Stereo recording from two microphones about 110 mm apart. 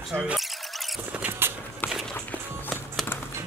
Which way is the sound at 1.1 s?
15° right (ahead or behind).